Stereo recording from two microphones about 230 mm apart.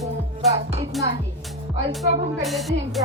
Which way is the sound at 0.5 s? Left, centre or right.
Right.